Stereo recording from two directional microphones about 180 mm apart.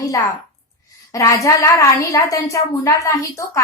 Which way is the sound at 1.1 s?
15° left (ahead or behind).